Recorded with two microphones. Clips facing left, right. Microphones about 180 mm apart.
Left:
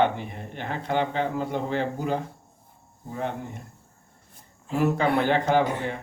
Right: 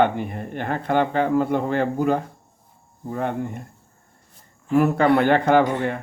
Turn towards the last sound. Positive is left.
turn(degrees=-60)  # may be behind; listen again after turning